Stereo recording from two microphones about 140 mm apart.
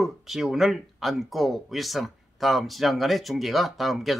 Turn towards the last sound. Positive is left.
turn(degrees=0)  # may be behind; listen again after turning